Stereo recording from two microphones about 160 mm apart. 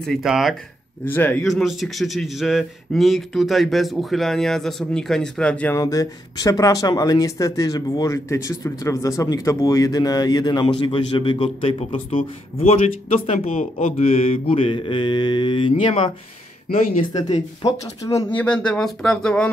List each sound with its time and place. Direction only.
0.0 s a man's voice: centre (ahead or behind)
1.0 s speech: 10° left (ahead or behind)
1.4 s a man's voice: centre (ahead or behind)
5.8 s speech: 20° left (ahead or behind)
15.7 s speech: 45° left (ahead or behind)
17.6 s speech: 20° left (ahead or behind)
18.3 s speech: 10° left (ahead or behind)